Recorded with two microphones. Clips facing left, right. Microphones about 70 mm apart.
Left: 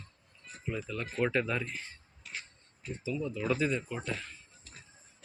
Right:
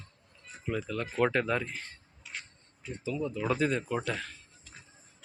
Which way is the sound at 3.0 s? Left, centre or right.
Right.